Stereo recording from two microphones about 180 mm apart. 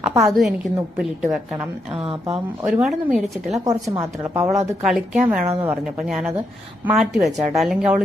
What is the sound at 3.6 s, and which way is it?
Speech, 20° right (ahead or behind).